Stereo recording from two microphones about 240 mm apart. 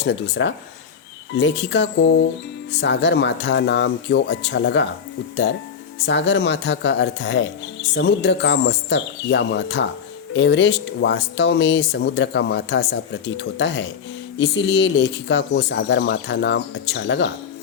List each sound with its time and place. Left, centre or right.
0.0 s speech: left
6.1 s speech: left